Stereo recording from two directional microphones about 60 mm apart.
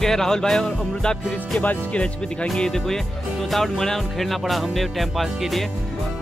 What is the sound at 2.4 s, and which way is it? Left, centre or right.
Speech, centre.